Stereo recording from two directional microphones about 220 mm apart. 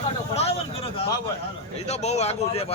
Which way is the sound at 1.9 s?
30° left (ahead or behind).